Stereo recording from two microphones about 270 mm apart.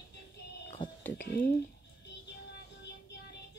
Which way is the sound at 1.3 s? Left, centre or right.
Left.